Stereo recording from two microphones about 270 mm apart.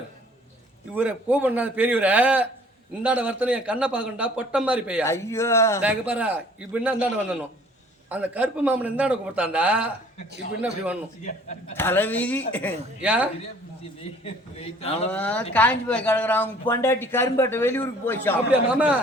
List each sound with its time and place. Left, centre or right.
0.9 s a man's voice: centre
5.0 s a man's voice: centre
5.8 s a man's voice: centre
11.3 s a man's voice: left
11.8 s a man's voice: centre
13.0 s a man's voice: centre
14.3 s a man's voice: left
15.1 s a man's voice: centre